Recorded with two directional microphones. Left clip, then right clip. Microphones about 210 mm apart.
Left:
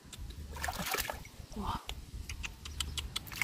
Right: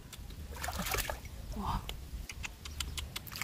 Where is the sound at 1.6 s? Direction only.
15° right (ahead or behind).